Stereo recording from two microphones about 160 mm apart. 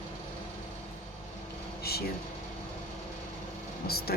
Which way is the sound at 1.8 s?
75° left (ahead or behind).